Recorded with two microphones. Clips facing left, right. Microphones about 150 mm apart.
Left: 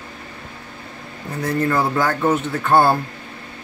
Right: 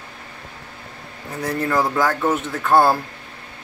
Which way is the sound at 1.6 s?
5° right (ahead or behind).